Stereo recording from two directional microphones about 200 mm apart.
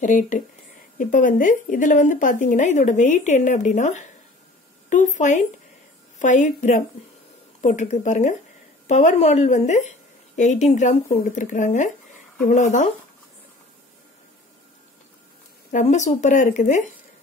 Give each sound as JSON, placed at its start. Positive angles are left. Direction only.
{"t": 0.0, "sound": "a woman's voice", "side_deg": 40}
{"t": 15.7, "sound": "speech", "side_deg": 35}